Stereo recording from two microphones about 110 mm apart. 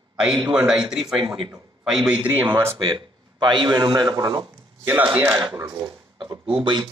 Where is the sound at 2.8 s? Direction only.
45° right (ahead or behind).